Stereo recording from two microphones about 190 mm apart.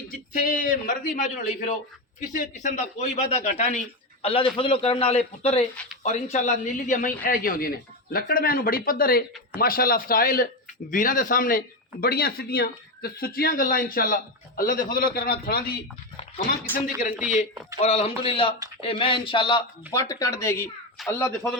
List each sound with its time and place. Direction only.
0.1 s a man's voice: 45° left (ahead or behind)
16.7 s a man's voice: 10° left (ahead or behind)
17.7 s a man's voice: 35° left (ahead or behind); by 21.3 s 15° left (ahead or behind)